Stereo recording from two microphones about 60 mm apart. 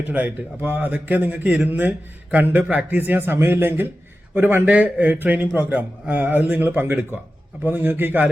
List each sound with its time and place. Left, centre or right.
0.1 s a man's voice: right